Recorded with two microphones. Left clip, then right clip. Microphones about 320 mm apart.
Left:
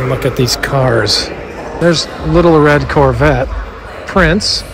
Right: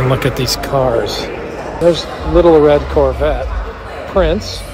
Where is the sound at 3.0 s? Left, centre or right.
Left.